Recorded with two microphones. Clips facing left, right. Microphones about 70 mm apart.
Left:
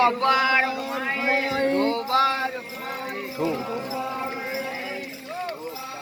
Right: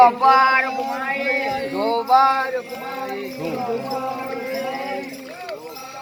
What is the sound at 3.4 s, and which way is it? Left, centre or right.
Music, left.